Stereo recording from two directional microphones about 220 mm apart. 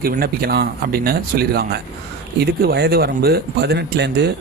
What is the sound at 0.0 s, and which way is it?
Speech, 45° right (ahead or behind).